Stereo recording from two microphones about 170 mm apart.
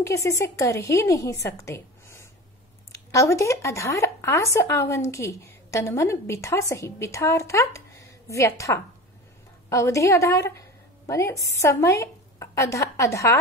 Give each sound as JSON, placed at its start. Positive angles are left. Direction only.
{"t": 0.0, "sound": "a woman's voice", "side_deg": 20}